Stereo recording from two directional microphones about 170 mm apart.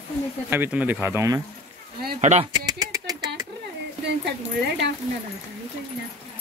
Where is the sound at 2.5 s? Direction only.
20° right (ahead or behind).